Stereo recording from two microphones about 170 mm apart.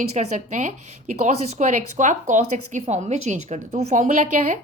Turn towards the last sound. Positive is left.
turn(degrees=-50)  # may be behind; listen again after turning